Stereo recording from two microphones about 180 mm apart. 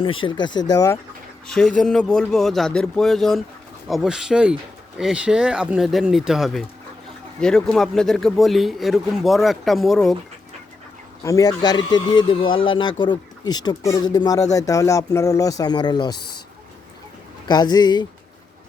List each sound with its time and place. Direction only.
0.3 s a man's voice: 25° left (ahead or behind)
1.5 s speech: 5° left (ahead or behind)
11.2 s a man's voice: 20° left (ahead or behind)
17.5 s a man's voice: 25° left (ahead or behind)